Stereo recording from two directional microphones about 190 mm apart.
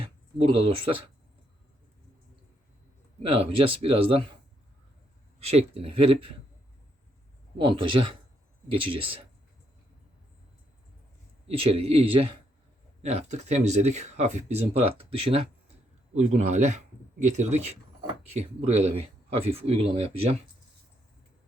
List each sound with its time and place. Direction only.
0.0 s speech: 30° right (ahead or behind)
3.2 s speech: 30° right (ahead or behind)
5.4 s speech: 35° right (ahead or behind)
7.6 s speech: 25° right (ahead or behind)
11.4 s speech: 30° right (ahead or behind)